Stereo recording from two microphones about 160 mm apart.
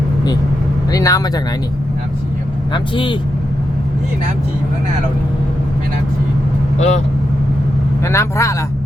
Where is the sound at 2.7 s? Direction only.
30° left (ahead or behind).